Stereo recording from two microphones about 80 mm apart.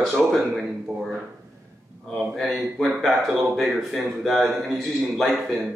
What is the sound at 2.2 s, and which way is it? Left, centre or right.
Speech, centre.